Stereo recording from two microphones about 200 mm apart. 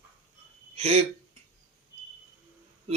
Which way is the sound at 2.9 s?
30° right (ahead or behind).